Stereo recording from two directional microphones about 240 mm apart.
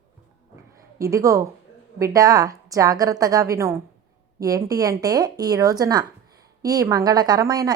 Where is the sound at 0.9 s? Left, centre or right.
Centre.